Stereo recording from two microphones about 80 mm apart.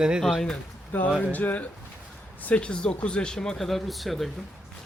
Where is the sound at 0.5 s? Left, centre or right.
Centre.